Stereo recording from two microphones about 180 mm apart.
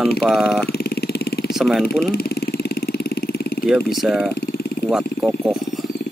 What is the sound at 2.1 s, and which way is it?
Vehicle, 60° left (ahead or behind).